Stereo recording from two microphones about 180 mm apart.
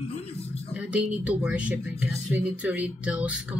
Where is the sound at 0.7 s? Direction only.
10° right (ahead or behind).